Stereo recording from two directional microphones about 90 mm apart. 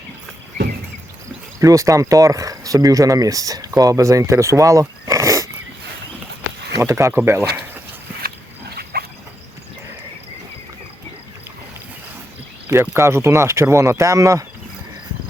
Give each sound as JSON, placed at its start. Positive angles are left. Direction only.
{"t": 1.5, "sound": "speech", "side_deg": -35}
{"t": 6.7, "sound": "speech", "side_deg": -35}
{"t": 12.6, "sound": "speech", "side_deg": -25}